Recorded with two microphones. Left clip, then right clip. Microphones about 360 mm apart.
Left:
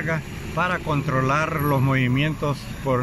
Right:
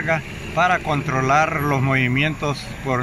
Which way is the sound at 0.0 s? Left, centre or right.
Centre.